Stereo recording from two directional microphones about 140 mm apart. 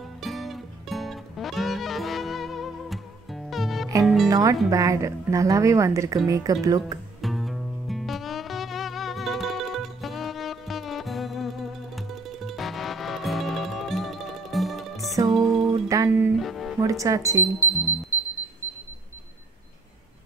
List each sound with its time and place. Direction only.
0.2 s music: centre (ahead or behind)
4.3 s a woman's voice: 25° right (ahead or behind)
7.2 s music: centre (ahead or behind)
15.9 s music: 25° right (ahead or behind)
16.3 s music: centre (ahead or behind)
16.8 s speech: 25° right (ahead or behind)
17.6 s music: 20° left (ahead or behind)